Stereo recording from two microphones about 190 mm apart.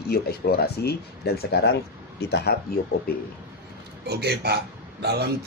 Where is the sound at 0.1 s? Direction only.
55° left (ahead or behind).